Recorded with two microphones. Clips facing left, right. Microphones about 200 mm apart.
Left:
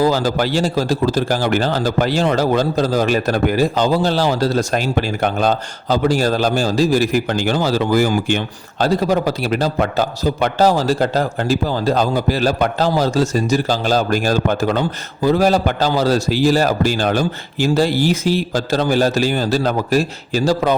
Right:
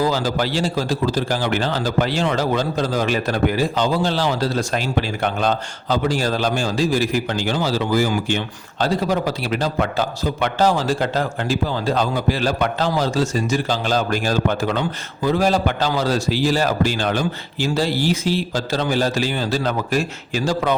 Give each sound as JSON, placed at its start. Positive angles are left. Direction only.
{"t": 0.0, "sound": "a man's voice", "side_deg": 45}